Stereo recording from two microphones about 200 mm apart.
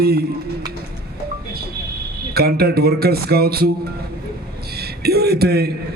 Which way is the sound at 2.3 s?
50° right (ahead or behind).